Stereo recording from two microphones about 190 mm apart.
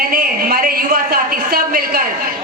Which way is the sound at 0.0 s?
50° right (ahead or behind).